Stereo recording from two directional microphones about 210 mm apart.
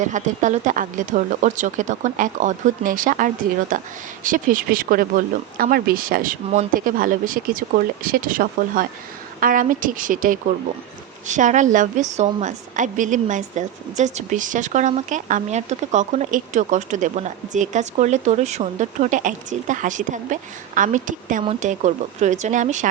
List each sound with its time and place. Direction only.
0.0 s a woman's voice: 35° right (ahead or behind)